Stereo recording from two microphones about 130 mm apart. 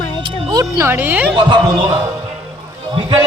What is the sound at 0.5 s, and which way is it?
Speech, 25° right (ahead or behind).